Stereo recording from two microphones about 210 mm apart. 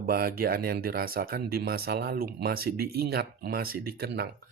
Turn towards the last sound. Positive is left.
turn(degrees=-50)  # may be behind; listen again after turning